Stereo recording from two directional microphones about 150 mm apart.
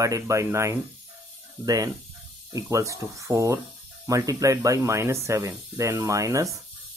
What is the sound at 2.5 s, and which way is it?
Speech, 20° right (ahead or behind).